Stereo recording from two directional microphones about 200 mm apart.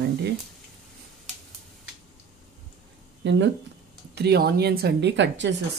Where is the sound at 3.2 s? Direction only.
65° right (ahead or behind).